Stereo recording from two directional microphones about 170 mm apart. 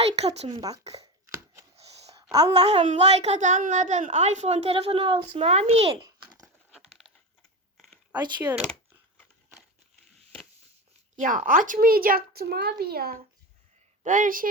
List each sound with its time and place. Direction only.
0.0 s speech: 35° right (ahead or behind)
0.4 s a woman's voice: 25° right (ahead or behind)
1.7 s a sound: 35° right (ahead or behind)
2.5 s speech: 35° right (ahead or behind)
8.4 s speech: 10° right (ahead or behind)
11.2 s speech: 50° right (ahead or behind)
14.0 s speech: 50° right (ahead or behind)